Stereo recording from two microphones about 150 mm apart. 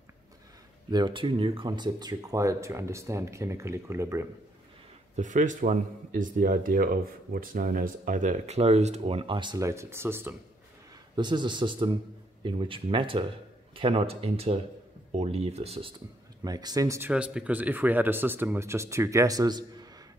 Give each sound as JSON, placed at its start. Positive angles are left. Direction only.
{"t": 0.8, "sound": "speech", "side_deg": -30}
{"t": 5.1, "sound": "speech", "side_deg": -55}
{"t": 11.1, "sound": "speech", "side_deg": -30}
{"t": 16.4, "sound": "speech", "side_deg": -25}
{"t": 17.1, "sound": "speech", "side_deg": -5}